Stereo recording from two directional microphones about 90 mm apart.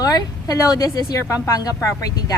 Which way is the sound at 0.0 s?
45° left (ahead or behind).